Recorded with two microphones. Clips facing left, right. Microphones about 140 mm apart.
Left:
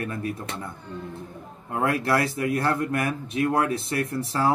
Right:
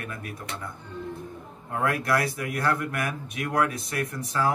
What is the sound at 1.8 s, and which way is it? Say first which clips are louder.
A man's voice: left 2 dB; 30° left (ahead or behind).